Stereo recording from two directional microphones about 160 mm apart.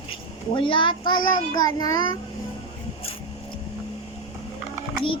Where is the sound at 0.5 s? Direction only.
30° left (ahead or behind).